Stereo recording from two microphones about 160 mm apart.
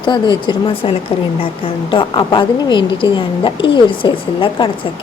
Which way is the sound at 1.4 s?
30° left (ahead or behind).